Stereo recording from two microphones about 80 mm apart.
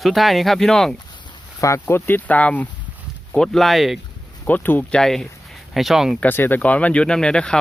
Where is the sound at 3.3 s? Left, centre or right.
Centre.